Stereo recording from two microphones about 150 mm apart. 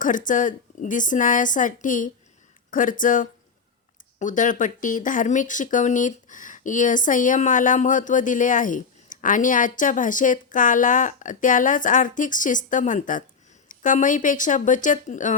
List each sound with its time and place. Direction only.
0.0 s speech: 60° left (ahead or behind)